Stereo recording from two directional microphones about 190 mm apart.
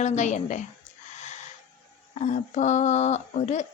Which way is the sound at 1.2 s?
40° left (ahead or behind).